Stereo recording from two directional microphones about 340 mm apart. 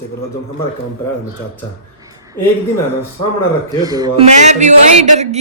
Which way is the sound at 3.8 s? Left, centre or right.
Centre.